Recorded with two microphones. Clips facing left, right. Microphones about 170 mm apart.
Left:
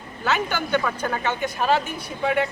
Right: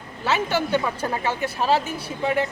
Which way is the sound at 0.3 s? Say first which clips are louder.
Right 1 dB; 30° right (ahead or behind).